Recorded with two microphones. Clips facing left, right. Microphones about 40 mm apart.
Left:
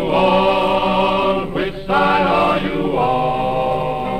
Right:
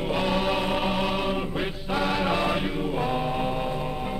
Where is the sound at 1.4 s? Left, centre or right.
Left.